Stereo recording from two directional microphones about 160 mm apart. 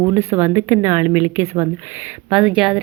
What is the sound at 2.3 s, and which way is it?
Speech, 5° right (ahead or behind).